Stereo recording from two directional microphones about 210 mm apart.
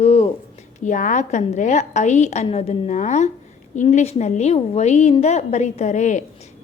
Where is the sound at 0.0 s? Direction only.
30° left (ahead or behind).